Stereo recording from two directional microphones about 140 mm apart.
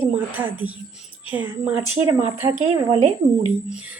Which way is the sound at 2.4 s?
35° right (ahead or behind).